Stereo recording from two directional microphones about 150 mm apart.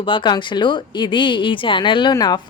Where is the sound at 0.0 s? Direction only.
35° left (ahead or behind).